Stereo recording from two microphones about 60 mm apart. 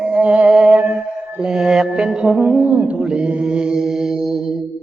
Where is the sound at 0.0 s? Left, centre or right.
Centre.